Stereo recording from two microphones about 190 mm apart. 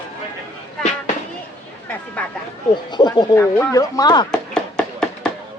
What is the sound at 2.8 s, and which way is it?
Speech, 25° left (ahead or behind).